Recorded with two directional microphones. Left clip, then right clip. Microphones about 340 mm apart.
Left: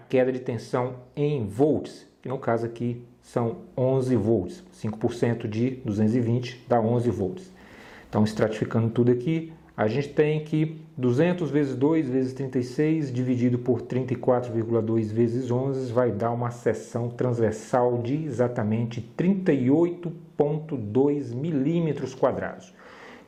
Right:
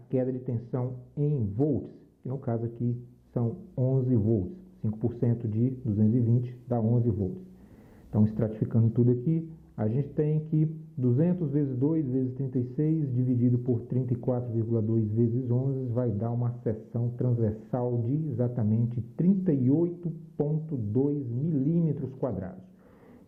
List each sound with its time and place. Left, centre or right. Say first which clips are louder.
0.1 s speech: left 7 dB; centre